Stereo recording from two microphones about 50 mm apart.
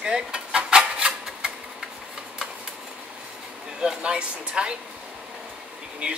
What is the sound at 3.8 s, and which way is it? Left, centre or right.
Speech, centre.